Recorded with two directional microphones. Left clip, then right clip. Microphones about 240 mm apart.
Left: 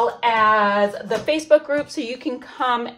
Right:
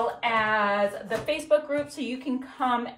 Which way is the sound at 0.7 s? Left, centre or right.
Left.